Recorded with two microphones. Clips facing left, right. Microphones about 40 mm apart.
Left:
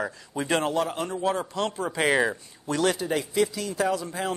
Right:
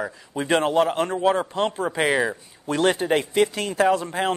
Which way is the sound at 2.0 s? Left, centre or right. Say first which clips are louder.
Right 1 dB; centre.